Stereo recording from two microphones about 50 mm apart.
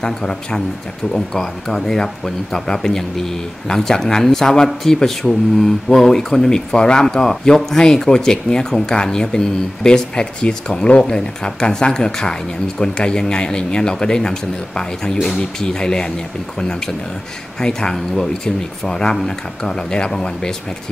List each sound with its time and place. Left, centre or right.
0.0 s speech: centre
1.7 s speech: centre